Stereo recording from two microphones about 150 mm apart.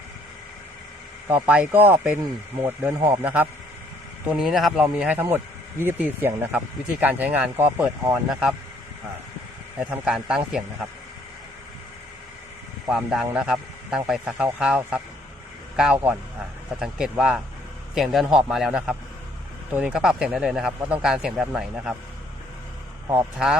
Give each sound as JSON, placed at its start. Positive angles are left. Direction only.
{"t": 1.3, "sound": "speech", "side_deg": -10}
{"t": 9.7, "sound": "speech", "side_deg": -5}
{"t": 12.9, "sound": "speech", "side_deg": -5}